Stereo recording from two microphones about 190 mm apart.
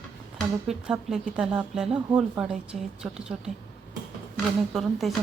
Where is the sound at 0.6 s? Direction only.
Centre (ahead or behind).